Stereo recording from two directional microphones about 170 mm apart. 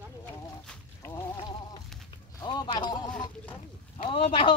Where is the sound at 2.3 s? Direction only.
25° left (ahead or behind).